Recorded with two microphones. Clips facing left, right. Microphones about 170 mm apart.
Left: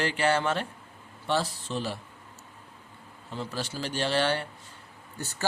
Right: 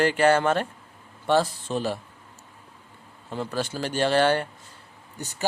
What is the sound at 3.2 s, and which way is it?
Speech, 50° right (ahead or behind).